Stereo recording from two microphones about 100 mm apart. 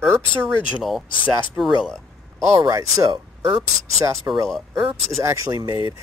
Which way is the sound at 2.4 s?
35° right (ahead or behind).